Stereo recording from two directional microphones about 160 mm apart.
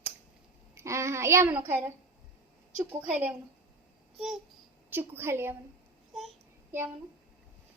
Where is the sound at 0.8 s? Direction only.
20° right (ahead or behind).